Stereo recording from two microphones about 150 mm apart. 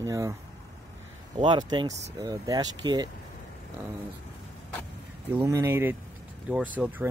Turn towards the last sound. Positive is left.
turn(degrees=-10)  # may be behind; listen again after turning